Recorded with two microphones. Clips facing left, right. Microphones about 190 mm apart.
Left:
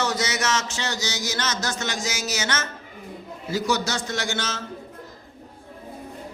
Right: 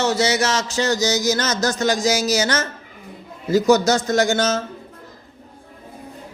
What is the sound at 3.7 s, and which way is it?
Speech, 45° right (ahead or behind).